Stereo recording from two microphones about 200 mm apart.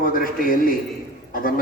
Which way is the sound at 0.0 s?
45° left (ahead or behind).